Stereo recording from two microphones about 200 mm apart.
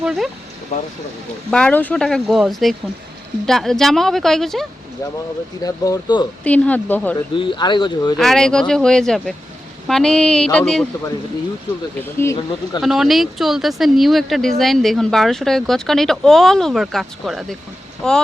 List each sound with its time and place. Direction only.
0.0 s a sound: centre (ahead or behind)
1.5 s speech: 5° left (ahead or behind)
5.6 s speech: 20° left (ahead or behind)
6.4 s speech: 5° left (ahead or behind)
7.3 s speech: 25° left (ahead or behind)
8.2 s speech: centre (ahead or behind)
12.0 s speech: 15° left (ahead or behind)
12.8 s speech: centre (ahead or behind)